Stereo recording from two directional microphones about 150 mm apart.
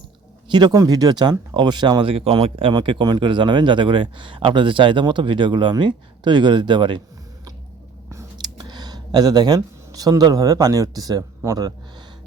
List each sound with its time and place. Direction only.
0.5 s speech: 25° right (ahead or behind)
8.1 s speech: 25° right (ahead or behind)